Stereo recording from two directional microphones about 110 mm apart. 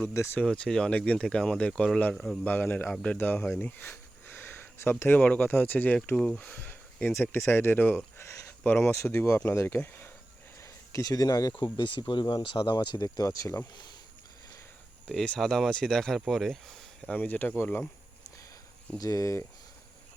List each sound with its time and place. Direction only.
0.3 s speech: 10° left (ahead or behind)
8.2 s a sound: 25° left (ahead or behind)
8.6 s speech: 10° left (ahead or behind)
10.6 s a sound: 30° left (ahead or behind)
11.6 s speech: 45° left (ahead or behind); by 13.6 s 30° left (ahead or behind)
15.1 s speech: 5° left (ahead or behind)
17.2 s speech: 15° left (ahead or behind)
18.9 s speech: 30° left (ahead or behind)